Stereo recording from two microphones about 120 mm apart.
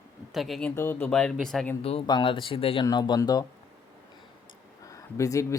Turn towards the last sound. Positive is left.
turn(degrees=25)  # may be behind; listen again after turning